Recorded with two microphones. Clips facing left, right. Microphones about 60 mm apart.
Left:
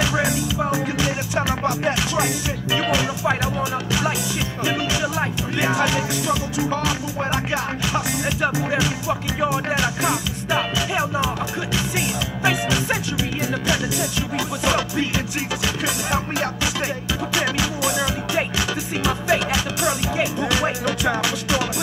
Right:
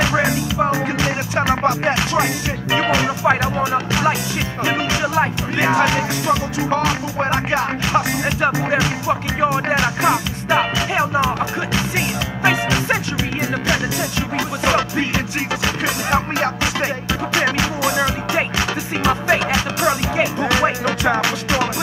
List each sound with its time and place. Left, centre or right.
0.0 s music: right
14.6 s music: right